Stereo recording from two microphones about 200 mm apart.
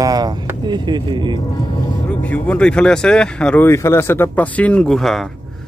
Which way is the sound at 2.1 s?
5° left (ahead or behind).